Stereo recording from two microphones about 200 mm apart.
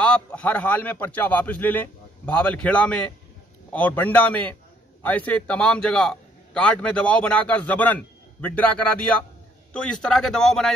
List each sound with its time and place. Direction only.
0.0 s a man's voice: 5° left (ahead or behind)